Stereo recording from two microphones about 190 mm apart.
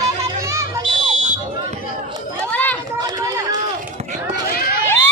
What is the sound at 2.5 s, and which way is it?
Run, 10° left (ahead or behind).